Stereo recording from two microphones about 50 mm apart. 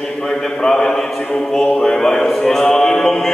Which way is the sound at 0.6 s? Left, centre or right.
Centre.